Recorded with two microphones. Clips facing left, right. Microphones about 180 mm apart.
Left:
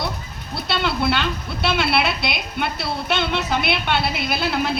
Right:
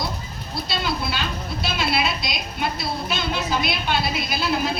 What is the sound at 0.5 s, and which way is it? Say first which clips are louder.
Speech: left 3 dB; 65° left (ahead or behind).